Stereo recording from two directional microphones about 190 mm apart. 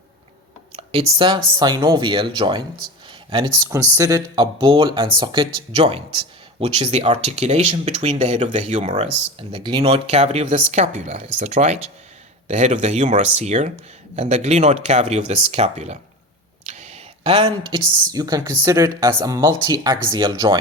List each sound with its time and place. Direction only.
0.8 s speech: 30° right (ahead or behind)